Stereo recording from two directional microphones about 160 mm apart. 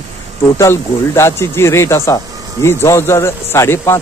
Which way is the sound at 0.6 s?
15° left (ahead or behind).